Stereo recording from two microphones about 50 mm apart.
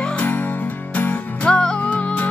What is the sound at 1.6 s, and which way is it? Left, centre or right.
Music, centre.